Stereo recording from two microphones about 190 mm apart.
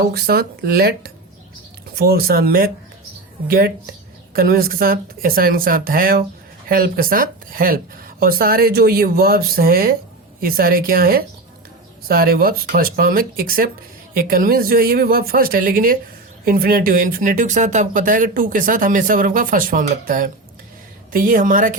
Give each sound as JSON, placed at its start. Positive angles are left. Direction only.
{"t": 0.1, "sound": "speech", "side_deg": -55}